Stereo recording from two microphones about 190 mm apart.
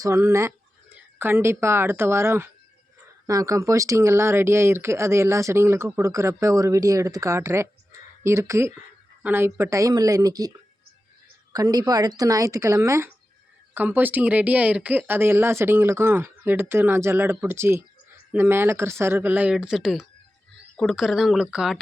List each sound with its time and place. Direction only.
0.0 s speech: 15° right (ahead or behind)
11.5 s speech: 20° right (ahead or behind); by 21.8 s 5° right (ahead or behind)